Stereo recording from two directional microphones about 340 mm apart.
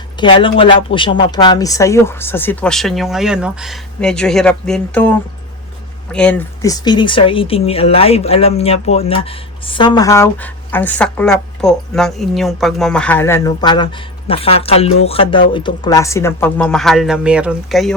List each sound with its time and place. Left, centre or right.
0.2 s speech: centre